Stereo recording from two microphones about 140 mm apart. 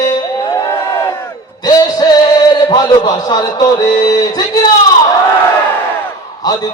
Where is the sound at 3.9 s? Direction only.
30° left (ahead or behind).